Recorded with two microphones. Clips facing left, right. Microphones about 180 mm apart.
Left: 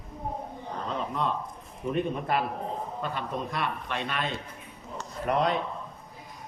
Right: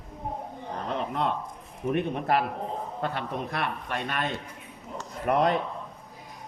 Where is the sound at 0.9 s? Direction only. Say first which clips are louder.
Right 2 dB; 60° right (ahead or behind).